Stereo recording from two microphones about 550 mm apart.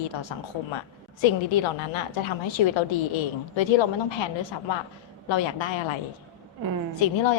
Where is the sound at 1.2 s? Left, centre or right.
Left.